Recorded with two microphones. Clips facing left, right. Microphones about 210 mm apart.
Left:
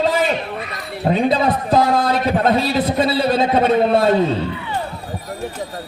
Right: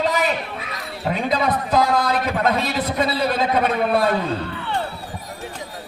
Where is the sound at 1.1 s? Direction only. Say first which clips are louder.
Left 5 dB; 30° left (ahead or behind).